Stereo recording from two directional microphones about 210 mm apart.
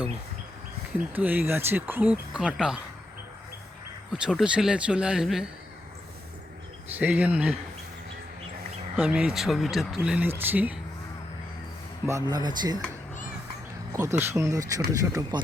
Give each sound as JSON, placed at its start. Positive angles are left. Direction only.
{"t": 0.9, "sound": "speech", "side_deg": -10}
{"t": 4.1, "sound": "speech", "side_deg": -5}
{"t": 6.9, "sound": "speech", "side_deg": -10}
{"t": 9.0, "sound": "speech", "side_deg": -5}
{"t": 12.0, "sound": "speech", "side_deg": -15}
{"t": 13.9, "sound": "speech", "side_deg": -15}